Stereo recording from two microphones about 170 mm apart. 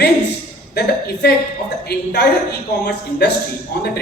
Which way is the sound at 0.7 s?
70° left (ahead or behind).